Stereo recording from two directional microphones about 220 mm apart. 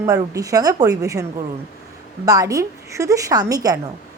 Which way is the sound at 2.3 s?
15° right (ahead or behind).